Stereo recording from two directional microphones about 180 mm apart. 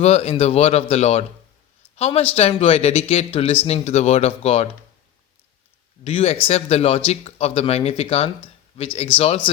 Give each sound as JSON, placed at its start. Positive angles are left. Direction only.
{"t": 0.0, "sound": "speech", "side_deg": 35}
{"t": 6.1, "sound": "speech", "side_deg": 30}